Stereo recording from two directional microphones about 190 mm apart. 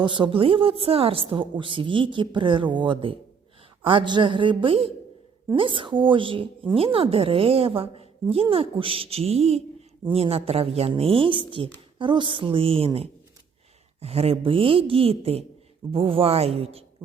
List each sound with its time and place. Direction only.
0.0 s a woman's voice: 25° right (ahead or behind)